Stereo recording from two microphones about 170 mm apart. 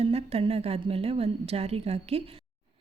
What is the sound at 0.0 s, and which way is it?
A woman's voice, 35° right (ahead or behind).